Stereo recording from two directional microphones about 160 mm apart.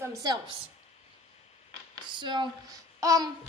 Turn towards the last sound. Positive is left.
turn(degrees=-20)  # may be behind; listen again after turning